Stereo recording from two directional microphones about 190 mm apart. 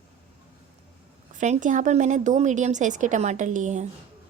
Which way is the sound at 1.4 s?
40° right (ahead or behind).